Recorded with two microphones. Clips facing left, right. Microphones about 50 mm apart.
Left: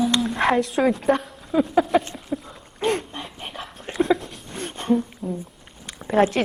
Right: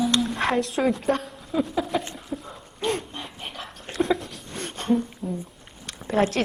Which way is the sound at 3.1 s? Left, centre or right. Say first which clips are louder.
Left 2 dB; centre.